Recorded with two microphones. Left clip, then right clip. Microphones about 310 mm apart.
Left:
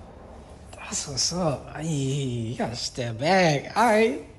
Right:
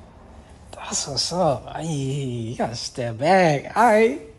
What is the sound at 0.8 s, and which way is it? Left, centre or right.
Speech, centre.